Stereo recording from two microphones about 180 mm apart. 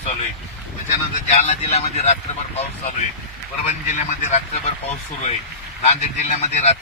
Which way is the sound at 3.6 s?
40° left (ahead or behind).